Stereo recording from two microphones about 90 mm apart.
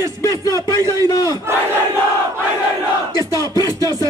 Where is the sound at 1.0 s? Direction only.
45° left (ahead or behind).